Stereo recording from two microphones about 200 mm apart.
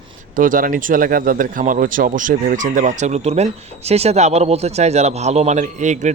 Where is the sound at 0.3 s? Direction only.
40° right (ahead or behind).